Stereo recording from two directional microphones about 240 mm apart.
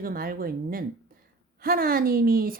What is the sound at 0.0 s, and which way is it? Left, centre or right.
A woman's voice, right.